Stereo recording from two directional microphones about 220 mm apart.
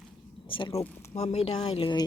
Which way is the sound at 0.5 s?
25° left (ahead or behind).